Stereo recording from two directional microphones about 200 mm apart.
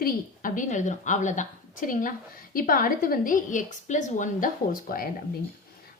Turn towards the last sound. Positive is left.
turn(degrees=45)  # may be behind; listen again after turning